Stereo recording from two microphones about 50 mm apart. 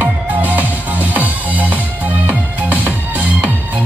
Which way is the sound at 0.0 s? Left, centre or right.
Right.